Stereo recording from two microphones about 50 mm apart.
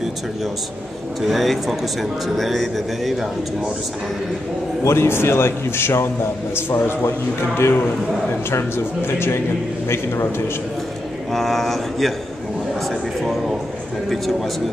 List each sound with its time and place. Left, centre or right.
1.2 s speech: centre
4.8 s a man's voice: left
11.3 s speech: centre